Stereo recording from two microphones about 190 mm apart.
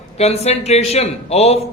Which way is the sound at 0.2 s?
35° left (ahead or behind).